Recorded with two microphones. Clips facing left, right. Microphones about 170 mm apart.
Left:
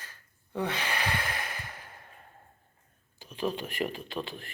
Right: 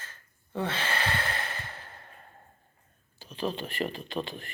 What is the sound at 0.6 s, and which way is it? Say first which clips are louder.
Sigh: right 1 dB; 15° left (ahead or behind).